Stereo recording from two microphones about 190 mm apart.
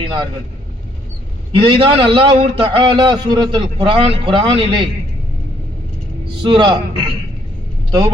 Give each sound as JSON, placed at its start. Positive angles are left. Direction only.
{"t": 0.0, "sound": "a man's voice", "side_deg": -25}
{"t": 1.5, "sound": "a man's voice", "side_deg": -25}
{"t": 6.4, "sound": "a man's voice", "side_deg": -25}